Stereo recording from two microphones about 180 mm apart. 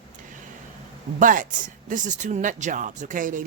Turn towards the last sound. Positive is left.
turn(degrees=-45)  # may be behind; listen again after turning